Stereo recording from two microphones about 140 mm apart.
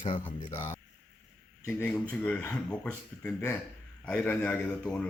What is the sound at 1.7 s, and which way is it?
Speech, 10° left (ahead or behind).